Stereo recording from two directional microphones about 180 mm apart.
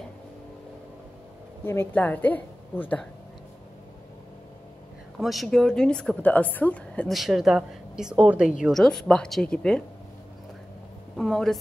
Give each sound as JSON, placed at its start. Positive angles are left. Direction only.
{"t": 1.6, "sound": "a woman's voice", "side_deg": 10}
{"t": 5.2, "sound": "a woman's voice", "side_deg": 0}
{"t": 11.1, "sound": "a woman's voice", "side_deg": 0}